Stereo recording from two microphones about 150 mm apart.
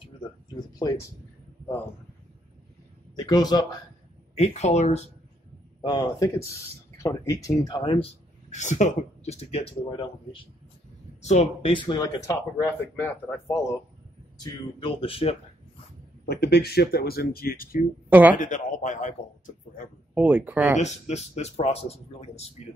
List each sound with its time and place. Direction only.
0.7 s speech: 25° left (ahead or behind)
3.2 s speech: 30° left (ahead or behind)
4.4 s speech: 50° left (ahead or behind)
5.8 s speech: 30° left (ahead or behind)
8.5 s speech: 55° left (ahead or behind)
11.2 s speech: 50° left (ahead or behind)
11.7 s speech: 30° left (ahead or behind)
12.9 s speech: 15° left (ahead or behind)
14.4 s speech: 30° left (ahead or behind)
16.3 s speech: 90° left
18.3 s a man's voice: 60° left (ahead or behind)
20.2 s speech: 10° right (ahead or behind)
20.7 s speech: 50° left (ahead or behind)